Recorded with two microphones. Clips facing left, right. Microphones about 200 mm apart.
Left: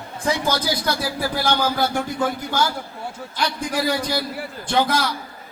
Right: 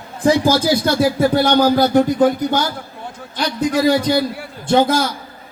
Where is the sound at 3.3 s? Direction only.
20° right (ahead or behind).